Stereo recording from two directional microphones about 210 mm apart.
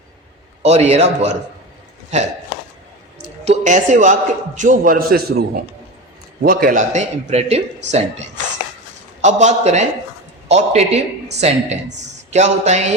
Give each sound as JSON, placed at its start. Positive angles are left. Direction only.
{"t": 0.6, "sound": "a man's voice", "side_deg": -30}